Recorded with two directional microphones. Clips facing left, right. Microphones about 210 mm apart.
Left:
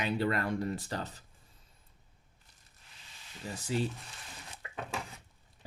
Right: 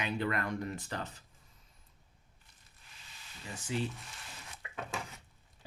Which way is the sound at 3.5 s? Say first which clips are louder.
Left 3 dB; 40° left (ahead or behind).